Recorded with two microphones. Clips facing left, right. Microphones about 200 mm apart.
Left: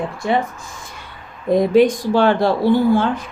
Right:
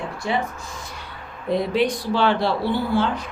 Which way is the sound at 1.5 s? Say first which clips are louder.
Left 8 dB; 45° left (ahead or behind).